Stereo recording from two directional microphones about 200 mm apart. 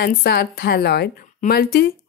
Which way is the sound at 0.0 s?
50° left (ahead or behind).